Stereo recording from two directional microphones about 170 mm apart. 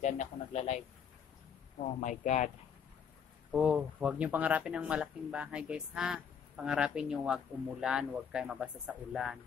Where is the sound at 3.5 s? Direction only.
5° right (ahead or behind).